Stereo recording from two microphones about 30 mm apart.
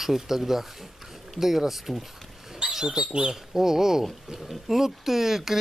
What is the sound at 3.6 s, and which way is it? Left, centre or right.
Speech, centre.